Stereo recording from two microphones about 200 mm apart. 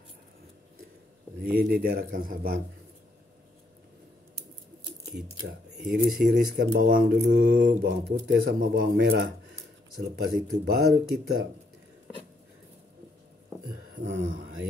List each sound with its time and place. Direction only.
1.4 s speech: 50° right (ahead or behind)
5.9 s speech: 45° right (ahead or behind)
14.0 s speech: 65° right (ahead or behind)